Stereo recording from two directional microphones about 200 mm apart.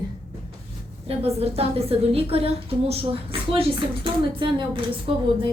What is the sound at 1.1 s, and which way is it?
A woman's voice, 30° right (ahead or behind).